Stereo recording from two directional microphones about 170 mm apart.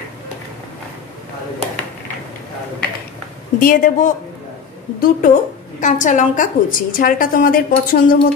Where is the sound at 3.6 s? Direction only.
50° left (ahead or behind).